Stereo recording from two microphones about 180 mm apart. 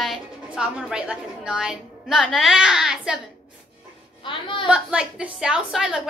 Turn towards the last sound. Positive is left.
turn(degrees=-5)  # may be behind; listen again after turning